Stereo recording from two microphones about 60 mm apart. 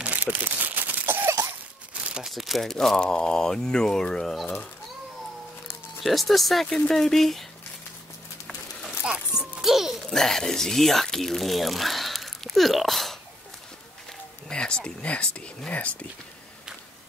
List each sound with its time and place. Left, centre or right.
0.0 s crumpling: right
2.1 s speech: centre
6.0 s speech: centre
9.4 s speech: centre
14.5 s speech: centre